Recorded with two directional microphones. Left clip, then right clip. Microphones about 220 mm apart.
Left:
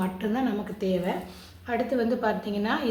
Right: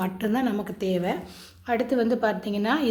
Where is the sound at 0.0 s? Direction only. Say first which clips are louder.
Right 2 dB; 45° right (ahead or behind).